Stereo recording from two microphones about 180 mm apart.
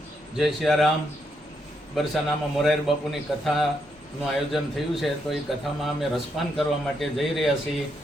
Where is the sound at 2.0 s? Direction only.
Centre (ahead or behind).